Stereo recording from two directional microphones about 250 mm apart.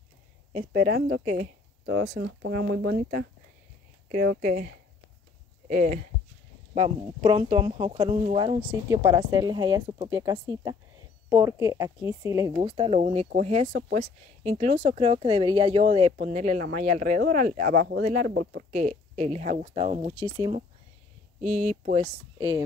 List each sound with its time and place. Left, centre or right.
0.5 s speech: right
1.2 s speech: right
2.1 s speech: right
6.7 s speech: right
12.5 s speech: right
18.3 s speech: right
18.7 s speech: right
21.6 s speech: right